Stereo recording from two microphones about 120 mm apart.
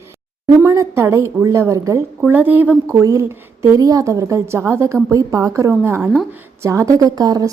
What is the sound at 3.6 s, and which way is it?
A woman's voice, 30° right (ahead or behind).